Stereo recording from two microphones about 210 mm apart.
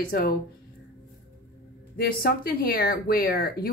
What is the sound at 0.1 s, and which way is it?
Speech, 45° left (ahead or behind).